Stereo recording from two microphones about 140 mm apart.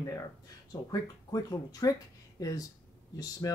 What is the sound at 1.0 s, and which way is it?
Speech, 25° left (ahead or behind).